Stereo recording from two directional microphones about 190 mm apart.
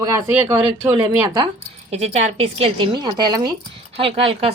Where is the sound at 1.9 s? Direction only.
35° right (ahead or behind).